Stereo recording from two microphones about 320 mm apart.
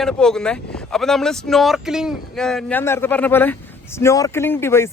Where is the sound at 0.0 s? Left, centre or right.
Centre.